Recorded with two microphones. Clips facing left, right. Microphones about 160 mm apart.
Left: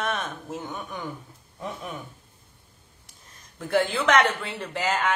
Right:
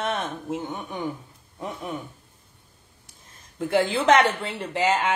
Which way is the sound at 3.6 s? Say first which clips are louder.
Right 2 dB; 30° right (ahead or behind).